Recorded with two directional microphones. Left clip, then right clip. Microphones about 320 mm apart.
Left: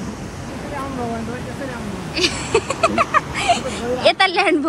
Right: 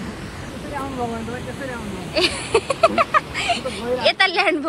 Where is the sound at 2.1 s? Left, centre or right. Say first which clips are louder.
Even; centre.